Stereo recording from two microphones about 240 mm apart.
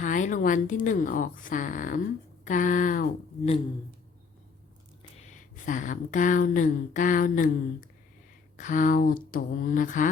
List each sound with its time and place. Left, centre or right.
0.0 s speech: left
5.1 s speech: left